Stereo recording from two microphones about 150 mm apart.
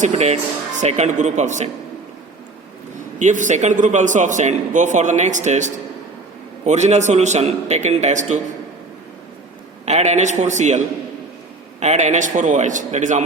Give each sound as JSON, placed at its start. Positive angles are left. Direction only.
{"t": 0.0, "sound": "a man's voice", "side_deg": -45}
{"t": 3.2, "sound": "a man's voice", "side_deg": -55}
{"t": 9.8, "sound": "a man's voice", "side_deg": -50}